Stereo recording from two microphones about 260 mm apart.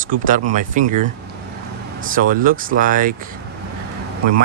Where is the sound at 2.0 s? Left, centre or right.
Right.